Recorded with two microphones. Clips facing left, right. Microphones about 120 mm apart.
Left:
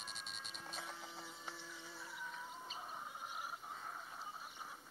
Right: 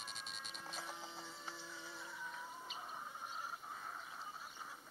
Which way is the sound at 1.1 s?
10° left (ahead or behind).